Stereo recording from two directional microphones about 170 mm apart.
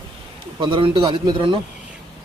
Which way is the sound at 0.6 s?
30° right (ahead or behind).